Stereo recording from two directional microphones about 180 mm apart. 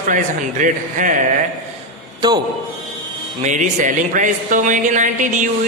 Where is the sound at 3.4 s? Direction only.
45° right (ahead or behind).